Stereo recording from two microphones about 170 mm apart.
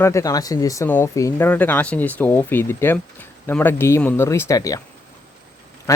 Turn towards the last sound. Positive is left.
turn(degrees=20)  # may be behind; listen again after turning